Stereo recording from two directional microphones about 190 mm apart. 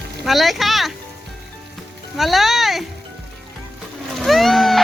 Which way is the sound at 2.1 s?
Centre (ahead or behind).